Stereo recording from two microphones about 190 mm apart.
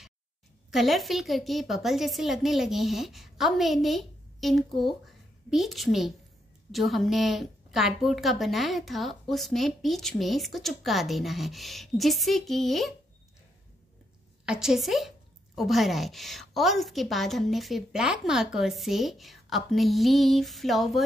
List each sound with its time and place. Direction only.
0.7 s speech: centre (ahead or behind)
14.4 s speech: 5° right (ahead or behind)